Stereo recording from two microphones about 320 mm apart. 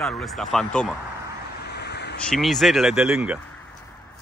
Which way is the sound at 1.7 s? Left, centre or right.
Left.